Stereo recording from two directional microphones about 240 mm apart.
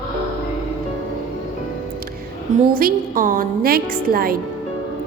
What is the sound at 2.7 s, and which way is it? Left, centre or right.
A woman's voice, right.